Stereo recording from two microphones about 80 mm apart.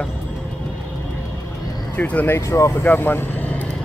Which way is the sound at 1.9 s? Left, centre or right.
Centre.